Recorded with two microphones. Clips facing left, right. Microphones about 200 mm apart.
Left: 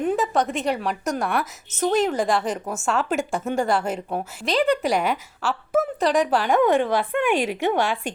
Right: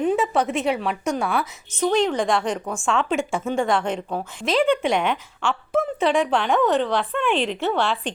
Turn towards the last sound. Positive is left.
turn(degrees=10)  # may be behind; listen again after turning